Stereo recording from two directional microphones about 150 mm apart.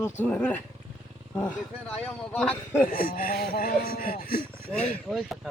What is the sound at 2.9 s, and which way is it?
Speech, 70° left (ahead or behind).